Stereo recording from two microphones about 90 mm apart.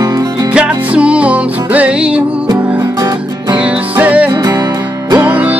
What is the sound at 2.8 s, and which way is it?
Music, 45° right (ahead or behind).